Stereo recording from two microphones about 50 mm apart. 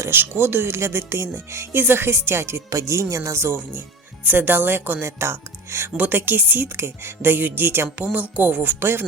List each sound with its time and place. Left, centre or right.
0.1 s speech: right
1.7 s speech: right
2.6 s speech: right
3.4 s speech: right
6.0 s speech: right
6.7 s speech: right
7.9 s speech: right
8.8 s speech: right